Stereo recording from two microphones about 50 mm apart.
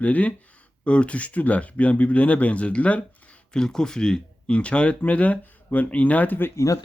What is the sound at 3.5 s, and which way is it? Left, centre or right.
Speech, centre.